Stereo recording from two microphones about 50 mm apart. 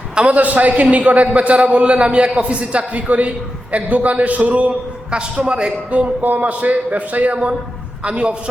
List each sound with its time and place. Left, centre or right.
0.1 s a man's voice: right